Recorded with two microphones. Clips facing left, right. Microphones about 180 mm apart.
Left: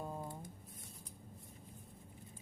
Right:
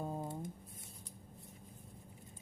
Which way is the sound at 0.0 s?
25° right (ahead or behind).